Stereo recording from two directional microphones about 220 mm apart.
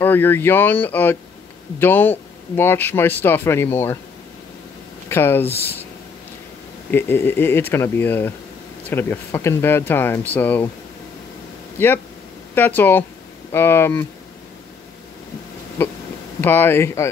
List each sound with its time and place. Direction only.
0.0 s speech: 10° left (ahead or behind)
5.1 s speech: 10° left (ahead or behind)
6.9 s speech: 10° left (ahead or behind)
11.8 s speech: 10° left (ahead or behind)
16.3 s speech: 10° left (ahead or behind)